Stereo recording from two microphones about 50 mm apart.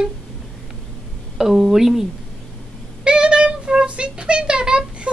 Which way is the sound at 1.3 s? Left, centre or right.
Centre.